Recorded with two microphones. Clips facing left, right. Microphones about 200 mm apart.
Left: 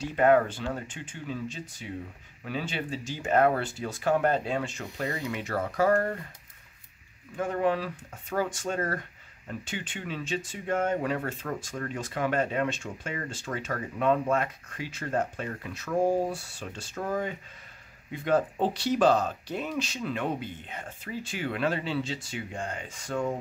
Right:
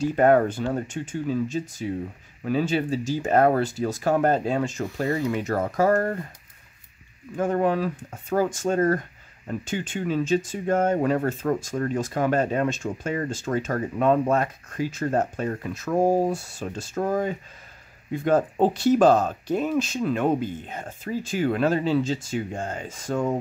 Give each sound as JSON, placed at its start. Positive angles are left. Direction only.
{"t": 0.0, "sound": "speech", "side_deg": -45}
{"t": 7.3, "sound": "speech", "side_deg": -45}